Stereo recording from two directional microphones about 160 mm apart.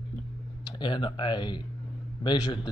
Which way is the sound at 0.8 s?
30° left (ahead or behind).